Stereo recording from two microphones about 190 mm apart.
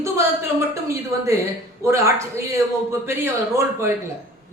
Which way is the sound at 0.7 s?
15° right (ahead or behind).